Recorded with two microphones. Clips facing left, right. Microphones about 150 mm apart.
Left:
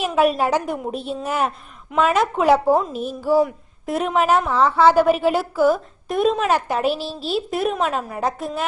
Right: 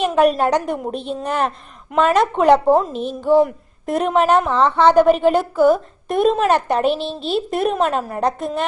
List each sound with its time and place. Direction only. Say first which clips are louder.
0.0 s a woman's voice: right 3 dB; 5° left (ahead or behind)